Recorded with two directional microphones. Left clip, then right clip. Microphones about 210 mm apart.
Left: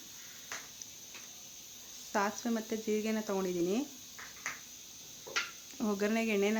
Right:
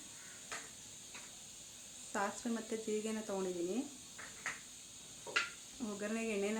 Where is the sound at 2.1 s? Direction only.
40° left (ahead or behind).